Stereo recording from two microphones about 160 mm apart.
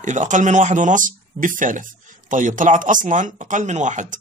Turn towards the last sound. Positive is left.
turn(degrees=-50)  # may be behind; listen again after turning